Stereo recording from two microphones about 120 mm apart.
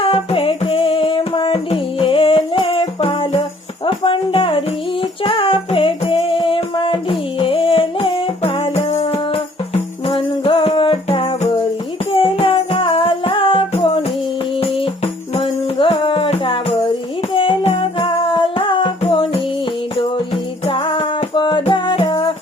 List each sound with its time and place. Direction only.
0.0 s music: 50° left (ahead or behind)
20.7 s music: 45° left (ahead or behind)